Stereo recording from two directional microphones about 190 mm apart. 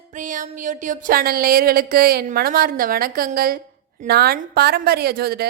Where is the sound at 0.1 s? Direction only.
45° right (ahead or behind).